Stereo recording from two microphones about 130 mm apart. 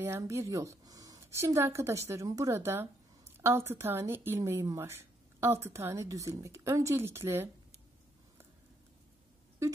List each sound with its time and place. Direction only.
0.0 s a woman's voice: 20° right (ahead or behind)